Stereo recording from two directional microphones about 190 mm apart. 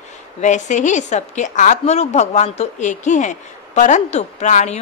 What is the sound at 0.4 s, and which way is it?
A woman's voice, 40° left (ahead or behind).